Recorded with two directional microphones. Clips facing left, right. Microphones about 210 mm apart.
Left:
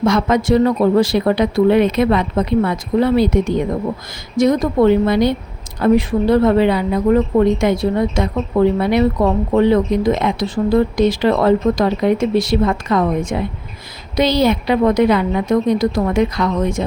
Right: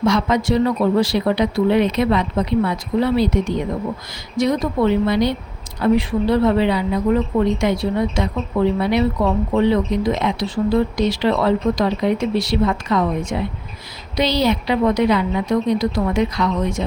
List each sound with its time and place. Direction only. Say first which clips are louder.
0.0 s speech: left 2 dB; 50° left (ahead or behind)